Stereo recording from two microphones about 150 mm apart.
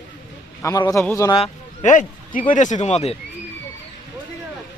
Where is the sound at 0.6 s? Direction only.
20° left (ahead or behind).